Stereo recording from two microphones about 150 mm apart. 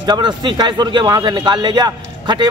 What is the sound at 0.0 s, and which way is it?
A man's voice, 30° right (ahead or behind).